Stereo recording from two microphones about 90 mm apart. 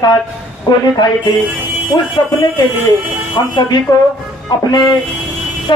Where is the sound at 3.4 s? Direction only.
45° left (ahead or behind).